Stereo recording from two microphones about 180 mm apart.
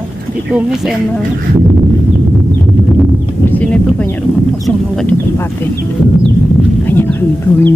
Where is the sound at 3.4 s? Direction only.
10° left (ahead or behind).